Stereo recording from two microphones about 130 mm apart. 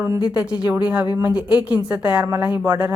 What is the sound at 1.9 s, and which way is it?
Speech, 15° right (ahead or behind).